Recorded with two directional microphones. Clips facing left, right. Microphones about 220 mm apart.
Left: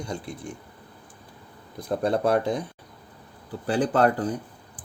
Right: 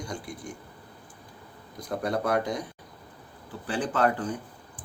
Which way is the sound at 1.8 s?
30° left (ahead or behind).